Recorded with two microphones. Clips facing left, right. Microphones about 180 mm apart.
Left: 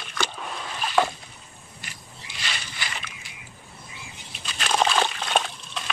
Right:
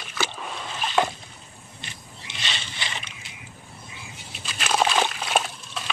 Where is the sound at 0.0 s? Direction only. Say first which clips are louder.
Even; 5° right (ahead or behind).